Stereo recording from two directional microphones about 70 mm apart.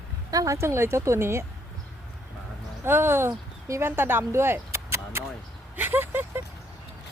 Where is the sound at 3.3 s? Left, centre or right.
Right.